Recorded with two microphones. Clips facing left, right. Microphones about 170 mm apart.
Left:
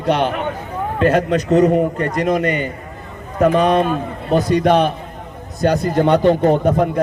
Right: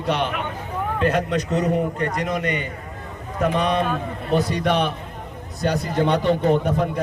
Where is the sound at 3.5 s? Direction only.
90° left.